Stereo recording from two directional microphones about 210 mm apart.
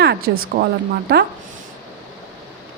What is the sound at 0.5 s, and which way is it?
Speech, 35° right (ahead or behind).